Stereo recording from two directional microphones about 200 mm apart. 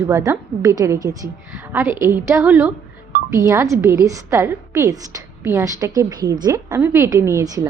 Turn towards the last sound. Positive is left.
turn(degrees=-15)  # may be behind; listen again after turning